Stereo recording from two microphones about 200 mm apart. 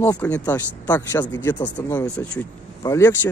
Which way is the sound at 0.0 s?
10° left (ahead or behind).